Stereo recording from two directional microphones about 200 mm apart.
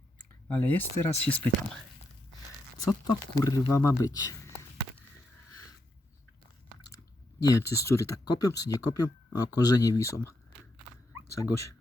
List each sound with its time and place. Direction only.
0.4 s speech: 10° left (ahead or behind)
2.8 s speech: 20° left (ahead or behind)
7.4 s speech: 15° left (ahead or behind)
11.3 s speech: 15° left (ahead or behind)